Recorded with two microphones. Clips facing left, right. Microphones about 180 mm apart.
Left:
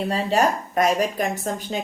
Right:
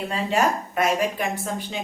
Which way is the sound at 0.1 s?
35° left (ahead or behind).